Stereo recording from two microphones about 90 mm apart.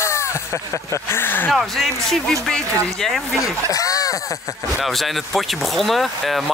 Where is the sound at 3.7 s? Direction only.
40° left (ahead or behind).